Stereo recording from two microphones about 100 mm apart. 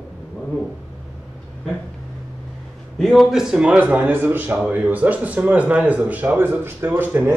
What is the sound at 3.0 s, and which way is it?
Speech, centre (ahead or behind).